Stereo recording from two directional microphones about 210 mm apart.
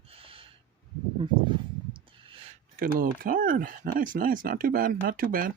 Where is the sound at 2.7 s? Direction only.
40° right (ahead or behind).